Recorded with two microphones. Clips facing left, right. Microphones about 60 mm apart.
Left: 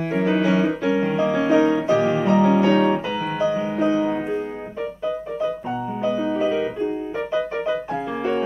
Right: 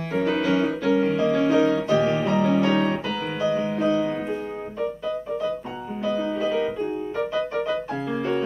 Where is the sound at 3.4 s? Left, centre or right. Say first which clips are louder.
Left 1 dB; centre.